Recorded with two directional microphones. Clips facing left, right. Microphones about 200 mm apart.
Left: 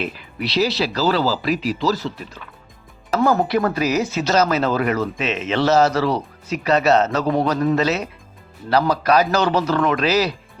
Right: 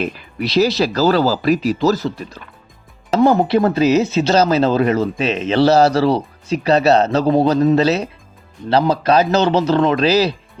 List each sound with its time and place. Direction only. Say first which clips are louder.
0.0 s speech: right 4 dB; 45° right (ahead or behind)
3.2 s speech: right 4 dB; 25° right (ahead or behind)